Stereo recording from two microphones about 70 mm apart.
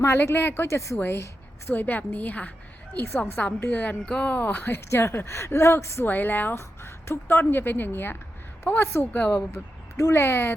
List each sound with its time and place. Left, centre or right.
0.0 s a woman's voice: left
0.9 s a woman's voice: left
4.0 s speech: centre
4.4 s a woman's voice: left
6.1 s a woman's voice: left
6.5 s a woman's voice: left